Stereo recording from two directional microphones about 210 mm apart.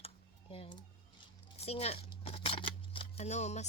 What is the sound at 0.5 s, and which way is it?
Speech, 25° left (ahead or behind).